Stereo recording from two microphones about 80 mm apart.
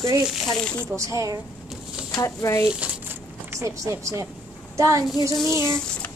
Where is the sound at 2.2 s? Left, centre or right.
Left.